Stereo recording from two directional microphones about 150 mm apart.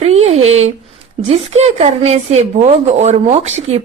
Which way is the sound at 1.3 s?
45° right (ahead or behind).